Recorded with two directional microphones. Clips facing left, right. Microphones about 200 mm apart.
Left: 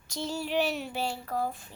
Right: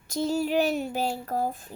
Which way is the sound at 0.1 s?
45° right (ahead or behind).